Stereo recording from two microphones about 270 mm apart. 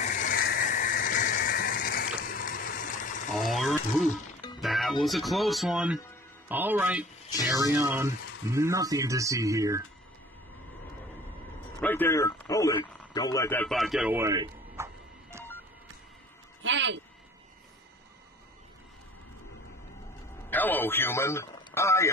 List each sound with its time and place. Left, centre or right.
0.0 s a sound: left
3.3 s a sound: centre
4.6 s music: centre
5.0 s speech: centre
11.8 s speech: centre
16.6 s speech: right
20.4 s a man's voice: centre